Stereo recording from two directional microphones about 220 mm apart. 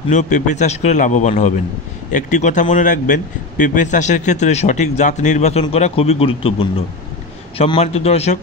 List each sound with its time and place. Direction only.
0.1 s a man's voice: 35° left (ahead or behind)